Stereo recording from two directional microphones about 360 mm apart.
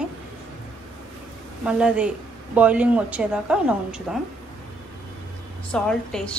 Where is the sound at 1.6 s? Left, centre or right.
Centre.